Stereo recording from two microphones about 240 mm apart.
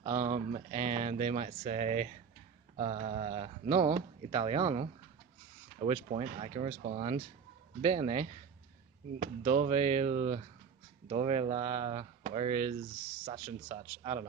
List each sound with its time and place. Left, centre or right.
0.2 s speech: right